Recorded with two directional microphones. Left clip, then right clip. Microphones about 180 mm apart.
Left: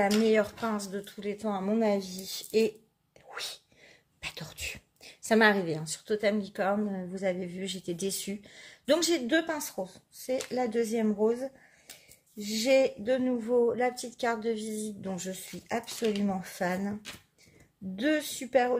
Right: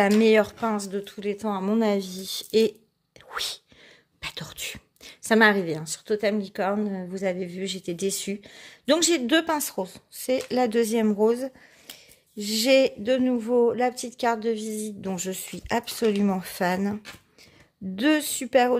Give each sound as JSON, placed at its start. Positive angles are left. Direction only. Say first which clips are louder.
{"t": 0.0, "sound": "speech", "louder": "right 6 dB", "side_deg": -45}